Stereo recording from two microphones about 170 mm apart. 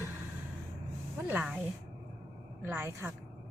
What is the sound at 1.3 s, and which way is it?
Speech, 10° right (ahead or behind).